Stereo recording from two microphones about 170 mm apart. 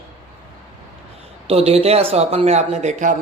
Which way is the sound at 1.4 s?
35° right (ahead or behind).